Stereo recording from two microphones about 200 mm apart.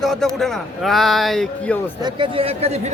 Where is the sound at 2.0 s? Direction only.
25° right (ahead or behind).